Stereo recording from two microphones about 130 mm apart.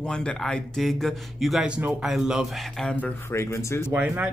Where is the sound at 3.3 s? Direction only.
20° left (ahead or behind).